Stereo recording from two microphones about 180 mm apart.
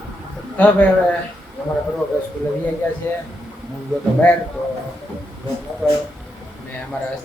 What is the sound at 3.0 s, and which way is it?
Speech, 15° left (ahead or behind).